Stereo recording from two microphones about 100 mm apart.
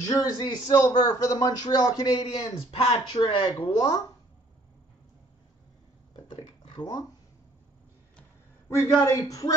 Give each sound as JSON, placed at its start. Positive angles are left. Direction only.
{"t": 0.0, "sound": "speech", "side_deg": 40}
{"t": 2.7, "sound": "speech", "side_deg": 80}
{"t": 3.2, "sound": "speech", "side_deg": 50}
{"t": 6.1, "sound": "a sound", "side_deg": 50}
{"t": 6.8, "sound": "speech", "side_deg": 40}
{"t": 8.6, "sound": "speech", "side_deg": 30}